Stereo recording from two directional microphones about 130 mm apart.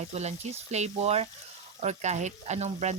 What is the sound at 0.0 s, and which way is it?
Speech, 60° right (ahead or behind).